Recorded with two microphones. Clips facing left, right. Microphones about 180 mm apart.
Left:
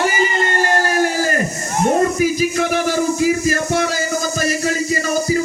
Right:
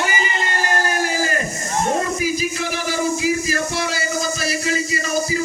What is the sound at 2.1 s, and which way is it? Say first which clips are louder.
Music: left 6 dB; 50° left (ahead or behind).